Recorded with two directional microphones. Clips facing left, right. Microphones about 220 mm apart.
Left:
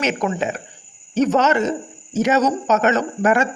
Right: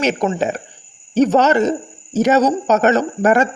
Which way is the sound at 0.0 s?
35° right (ahead or behind).